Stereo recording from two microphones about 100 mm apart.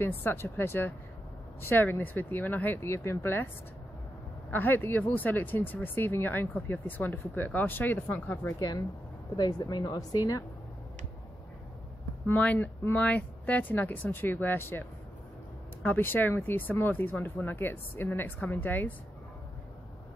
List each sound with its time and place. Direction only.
0.0 s speech: 25° left (ahead or behind)
4.5 s speech: 20° left (ahead or behind)
9.4 s speech: 40° left (ahead or behind)
12.3 s speech: 15° left (ahead or behind)